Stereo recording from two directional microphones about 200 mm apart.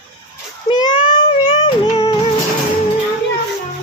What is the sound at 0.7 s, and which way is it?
Child singing, 25° left (ahead or behind).